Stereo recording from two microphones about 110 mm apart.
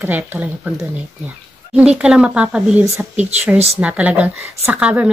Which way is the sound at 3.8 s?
10° right (ahead or behind).